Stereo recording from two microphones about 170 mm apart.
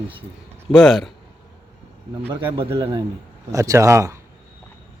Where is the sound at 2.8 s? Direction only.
30° right (ahead or behind).